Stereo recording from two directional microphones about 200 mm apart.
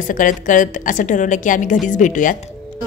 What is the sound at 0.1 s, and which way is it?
A woman's voice, 40° left (ahead or behind).